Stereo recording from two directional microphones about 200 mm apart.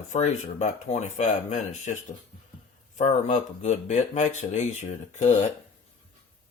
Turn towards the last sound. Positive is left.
turn(degrees=35)  # may be behind; listen again after turning